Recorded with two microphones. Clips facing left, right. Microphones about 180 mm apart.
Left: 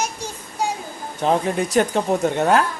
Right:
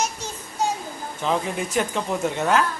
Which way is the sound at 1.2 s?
40° left (ahead or behind).